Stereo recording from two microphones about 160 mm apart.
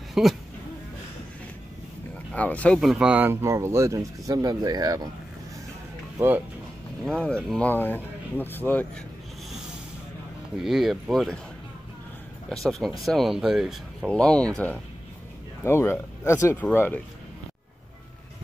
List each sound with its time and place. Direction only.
0.1 s speech: centre (ahead or behind)
2.3 s speech: 10° left (ahead or behind); by 5.1 s 25° right (ahead or behind)
6.1 s speech: 15° right (ahead or behind)
7.1 s speech: 5° left (ahead or behind)
10.5 s speech: centre (ahead or behind)
12.6 s speech: centre (ahead or behind)